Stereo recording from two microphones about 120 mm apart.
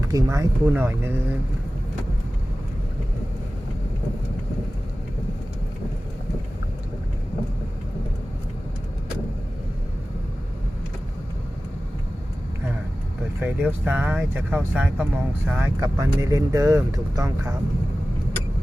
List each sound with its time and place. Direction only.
0.0 s speech: 30° right (ahead or behind)
13.4 s speech: 15° right (ahead or behind)
15.8 s speech: 25° right (ahead or behind)